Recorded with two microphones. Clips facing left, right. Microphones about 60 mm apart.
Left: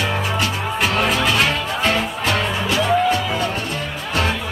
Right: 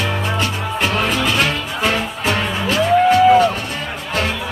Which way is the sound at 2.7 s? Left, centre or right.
Right.